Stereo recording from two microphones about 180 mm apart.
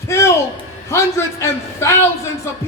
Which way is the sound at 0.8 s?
15° left (ahead or behind).